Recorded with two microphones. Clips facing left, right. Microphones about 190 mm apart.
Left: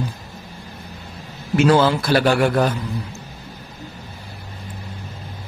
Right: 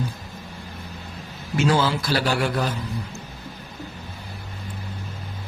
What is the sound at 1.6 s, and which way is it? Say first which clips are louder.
A man's voice: left 6 dB; 60° left (ahead or behind).